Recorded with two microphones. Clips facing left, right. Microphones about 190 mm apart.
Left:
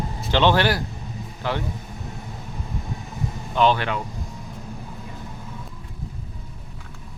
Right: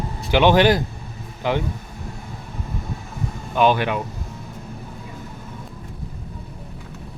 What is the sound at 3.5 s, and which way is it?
Speech, 10° right (ahead or behind).